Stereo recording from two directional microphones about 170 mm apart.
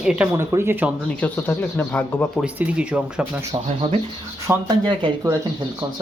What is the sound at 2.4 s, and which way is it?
A woman's voice, 5° right (ahead or behind).